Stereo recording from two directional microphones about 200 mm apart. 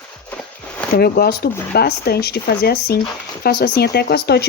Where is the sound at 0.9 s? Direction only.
50° left (ahead or behind).